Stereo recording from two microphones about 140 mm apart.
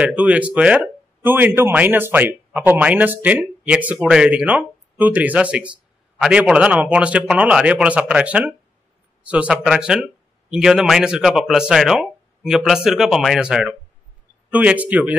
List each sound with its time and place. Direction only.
0.0 s speech: 10° right (ahead or behind)